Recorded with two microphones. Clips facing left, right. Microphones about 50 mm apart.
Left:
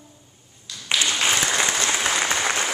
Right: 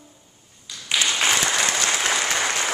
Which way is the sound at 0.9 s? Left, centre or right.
Centre.